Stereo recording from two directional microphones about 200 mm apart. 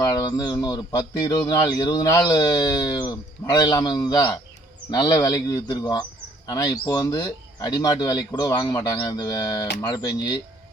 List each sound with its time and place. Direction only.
0.0 s speech: 20° left (ahead or behind)